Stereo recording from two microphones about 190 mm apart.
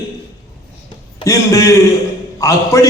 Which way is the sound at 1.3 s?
15° left (ahead or behind).